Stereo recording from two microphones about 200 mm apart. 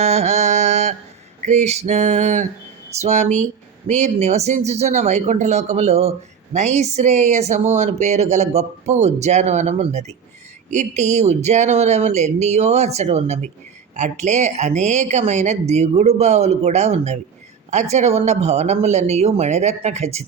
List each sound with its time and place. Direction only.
0.0 s mantra: 35° right (ahead or behind)
1.5 s speech: 35° right (ahead or behind)